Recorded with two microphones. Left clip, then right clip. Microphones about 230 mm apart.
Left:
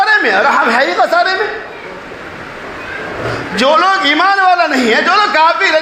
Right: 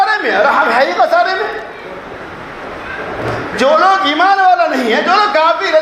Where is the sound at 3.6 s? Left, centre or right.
Left.